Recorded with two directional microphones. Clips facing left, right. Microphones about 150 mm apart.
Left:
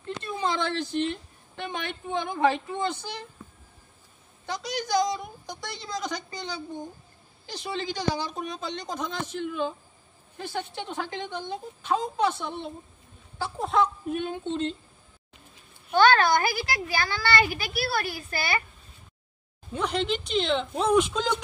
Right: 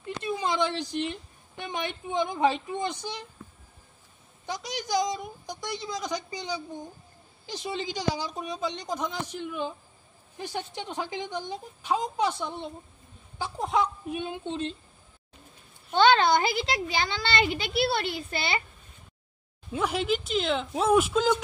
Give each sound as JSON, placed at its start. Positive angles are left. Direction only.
{"t": 0.0, "sound": "a sound", "side_deg": -15}
{"t": 1.6, "sound": "a woman's voice", "side_deg": -15}
{"t": 4.5, "sound": "a woman's voice", "side_deg": -15}
{"t": 15.9, "sound": "speech", "side_deg": -20}
{"t": 19.7, "sound": "speech", "side_deg": -5}